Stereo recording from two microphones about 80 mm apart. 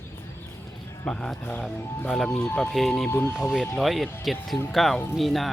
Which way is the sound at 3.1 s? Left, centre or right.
Left.